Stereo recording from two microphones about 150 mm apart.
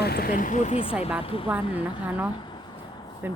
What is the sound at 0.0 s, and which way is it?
Speech, 90° left.